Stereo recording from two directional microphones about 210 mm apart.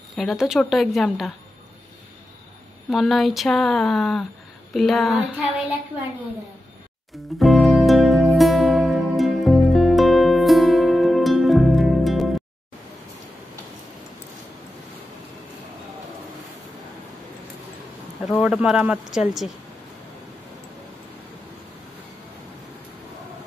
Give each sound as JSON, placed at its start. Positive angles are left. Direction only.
{"t": 0.1, "sound": "speech", "side_deg": 0}
{"t": 2.9, "sound": "speech", "side_deg": 0}
{"t": 7.3, "sound": "music", "side_deg": 0}
{"t": 18.2, "sound": "speech", "side_deg": 0}